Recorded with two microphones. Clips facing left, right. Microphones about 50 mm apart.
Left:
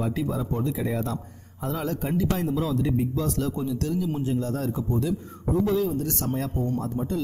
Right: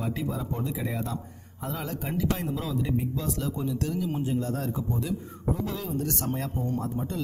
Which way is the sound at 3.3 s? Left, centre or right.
Right.